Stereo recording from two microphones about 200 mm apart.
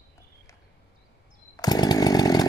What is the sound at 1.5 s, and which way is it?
Chainsaw, 20° left (ahead or behind).